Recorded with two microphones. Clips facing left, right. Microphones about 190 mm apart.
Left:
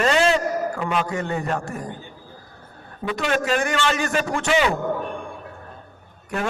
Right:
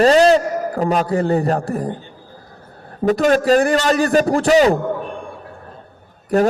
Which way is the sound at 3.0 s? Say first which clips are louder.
Right 9 dB; 40° right (ahead or behind).